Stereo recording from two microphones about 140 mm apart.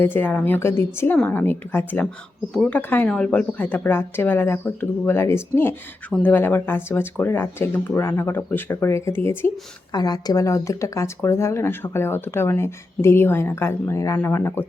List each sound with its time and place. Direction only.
0.0 s speech: 15° left (ahead or behind)
9.9 s speech: 30° left (ahead or behind)